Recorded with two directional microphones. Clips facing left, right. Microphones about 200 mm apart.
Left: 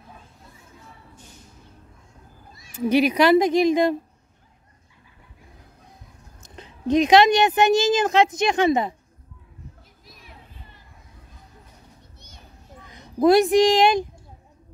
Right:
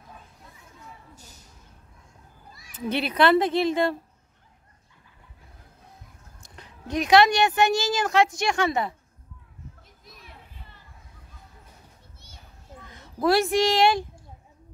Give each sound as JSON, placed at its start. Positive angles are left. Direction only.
{"t": 2.5, "sound": "cat", "side_deg": 25}
{"t": 2.9, "sound": "a woman's voice", "side_deg": 10}
{"t": 6.4, "sound": "speech", "side_deg": 20}
{"t": 12.8, "sound": "speech", "side_deg": 15}